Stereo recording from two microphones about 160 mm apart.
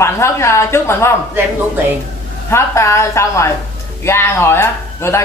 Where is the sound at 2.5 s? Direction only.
15° left (ahead or behind).